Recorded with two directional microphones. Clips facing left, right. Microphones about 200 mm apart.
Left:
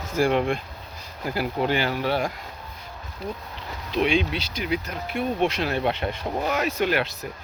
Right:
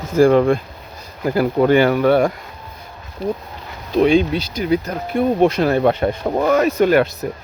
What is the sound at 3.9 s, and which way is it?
Speech, 45° right (ahead or behind).